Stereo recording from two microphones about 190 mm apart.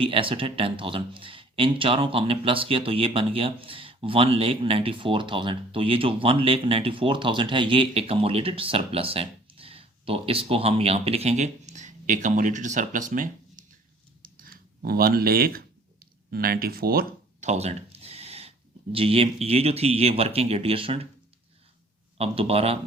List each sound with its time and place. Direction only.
0.0 s speech: 30° right (ahead or behind)
14.2 s a sound: 50° right (ahead or behind)
17.4 s speech: 35° right (ahead or behind)
22.2 s speech: 30° right (ahead or behind)